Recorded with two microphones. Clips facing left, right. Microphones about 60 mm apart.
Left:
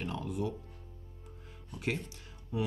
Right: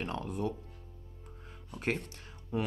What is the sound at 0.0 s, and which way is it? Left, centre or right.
Speech, right.